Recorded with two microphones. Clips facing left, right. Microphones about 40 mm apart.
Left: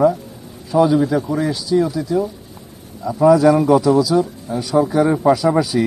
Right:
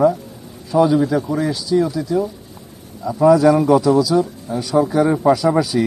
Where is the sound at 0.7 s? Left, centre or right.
Centre.